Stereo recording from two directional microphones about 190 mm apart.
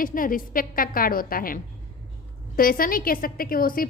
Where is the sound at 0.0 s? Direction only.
45° left (ahead or behind).